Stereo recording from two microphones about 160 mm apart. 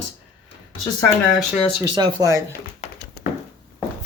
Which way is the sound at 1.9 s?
25° right (ahead or behind).